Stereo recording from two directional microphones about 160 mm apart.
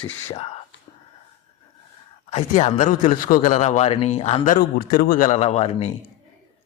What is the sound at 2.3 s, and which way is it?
Speech, 45° left (ahead or behind).